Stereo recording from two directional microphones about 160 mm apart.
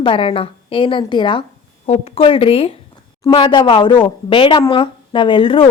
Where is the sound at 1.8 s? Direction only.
40° left (ahead or behind).